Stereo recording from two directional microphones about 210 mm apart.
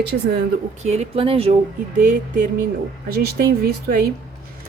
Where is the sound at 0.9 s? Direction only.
30° right (ahead or behind).